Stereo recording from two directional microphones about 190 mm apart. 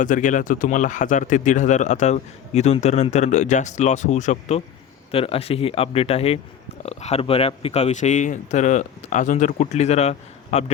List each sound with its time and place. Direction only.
0.0 s speech: 45° left (ahead or behind)